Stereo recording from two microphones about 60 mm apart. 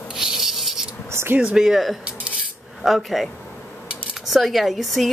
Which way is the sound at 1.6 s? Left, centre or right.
Centre.